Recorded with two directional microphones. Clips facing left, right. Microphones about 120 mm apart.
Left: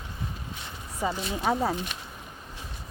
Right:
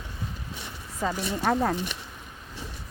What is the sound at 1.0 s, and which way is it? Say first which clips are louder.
Speech: right 1 dB; 10° left (ahead or behind).